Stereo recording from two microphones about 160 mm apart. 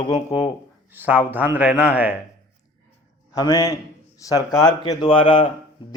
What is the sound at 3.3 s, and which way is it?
A man's voice, 20° left (ahead or behind).